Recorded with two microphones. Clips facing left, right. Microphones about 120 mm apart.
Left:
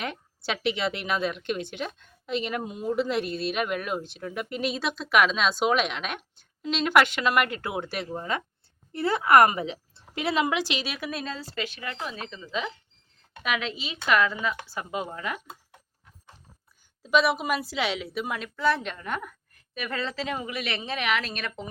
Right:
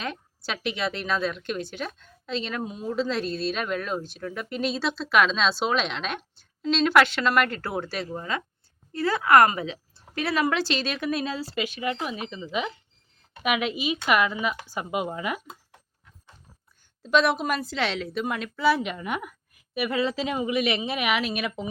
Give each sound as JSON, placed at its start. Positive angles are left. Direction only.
{"t": 0.0, "sound": "a woman's voice", "side_deg": 20}
{"t": 17.0, "sound": "a woman's voice", "side_deg": 5}